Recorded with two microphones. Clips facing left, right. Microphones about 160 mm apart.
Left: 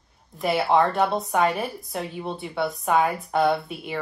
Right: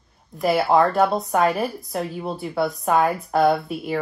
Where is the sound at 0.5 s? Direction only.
40° right (ahead or behind).